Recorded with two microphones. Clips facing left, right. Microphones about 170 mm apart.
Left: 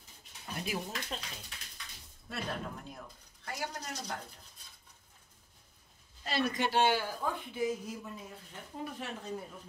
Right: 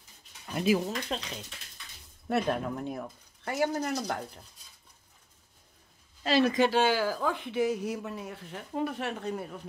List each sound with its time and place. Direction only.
0.6 s speech: 90° right
2.2 s speech: 65° right (ahead or behind)
6.2 s speech: 90° right; by 9.6 s 70° right (ahead or behind)